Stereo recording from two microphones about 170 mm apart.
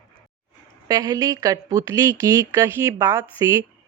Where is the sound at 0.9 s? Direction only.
20° right (ahead or behind).